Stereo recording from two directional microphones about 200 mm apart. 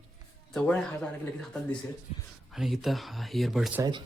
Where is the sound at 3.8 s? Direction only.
20° right (ahead or behind).